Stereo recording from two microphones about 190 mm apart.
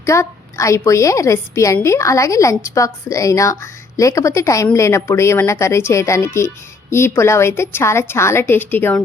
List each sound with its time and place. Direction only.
0.0 s a woman's voice: 15° left (ahead or behind)